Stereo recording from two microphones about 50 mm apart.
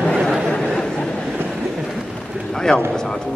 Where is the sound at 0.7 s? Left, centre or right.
Centre.